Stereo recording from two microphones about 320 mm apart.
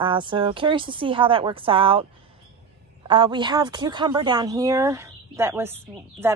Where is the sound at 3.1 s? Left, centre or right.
Centre.